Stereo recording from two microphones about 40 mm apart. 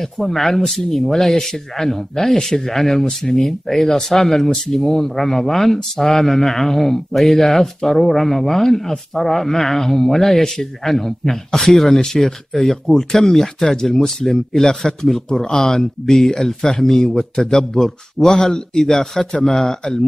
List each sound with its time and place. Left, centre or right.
0.0 s speech: centre
14.7 s speech: centre